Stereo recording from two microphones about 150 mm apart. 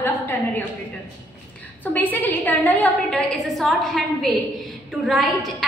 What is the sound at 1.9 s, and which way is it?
A woman's voice, 10° left (ahead or behind).